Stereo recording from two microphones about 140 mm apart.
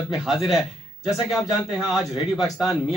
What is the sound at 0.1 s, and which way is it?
A man's voice, 5° right (ahead or behind).